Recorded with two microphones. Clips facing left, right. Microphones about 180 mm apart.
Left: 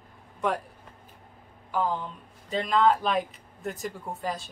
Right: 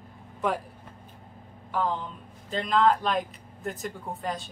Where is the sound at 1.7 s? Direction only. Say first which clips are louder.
Even; 5° left (ahead or behind).